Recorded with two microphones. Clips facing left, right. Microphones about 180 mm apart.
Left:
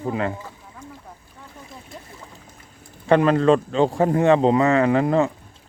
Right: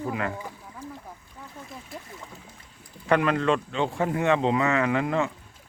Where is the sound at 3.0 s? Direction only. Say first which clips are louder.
Left 7 dB; 30° left (ahead or behind).